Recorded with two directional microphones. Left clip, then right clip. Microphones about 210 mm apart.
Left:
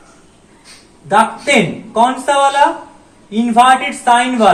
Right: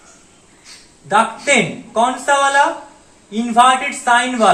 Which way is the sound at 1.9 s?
5° right (ahead or behind).